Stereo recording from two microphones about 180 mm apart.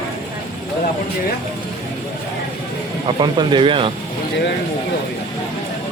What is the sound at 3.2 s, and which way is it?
Speech, 25° right (ahead or behind).